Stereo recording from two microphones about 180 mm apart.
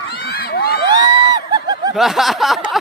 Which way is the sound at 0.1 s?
60° left (ahead or behind).